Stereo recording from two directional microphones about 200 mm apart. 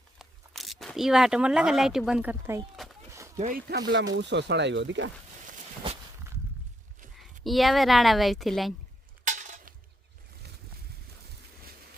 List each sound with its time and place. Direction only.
0.2 s speech: centre (ahead or behind)
3.3 s speech: 35° right (ahead or behind)
3.7 s speech: 60° right (ahead or behind)
7.4 s a woman's voice: centre (ahead or behind)
9.2 s a sound: 35° right (ahead or behind)